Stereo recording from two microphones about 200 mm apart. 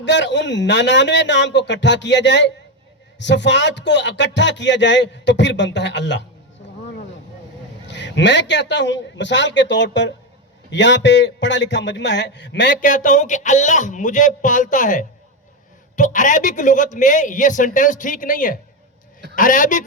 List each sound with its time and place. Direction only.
0.0 s speech: 60° left (ahead or behind)
7.9 s speech: 60° left (ahead or behind)
12.8 s a man's voice: 40° left (ahead or behind)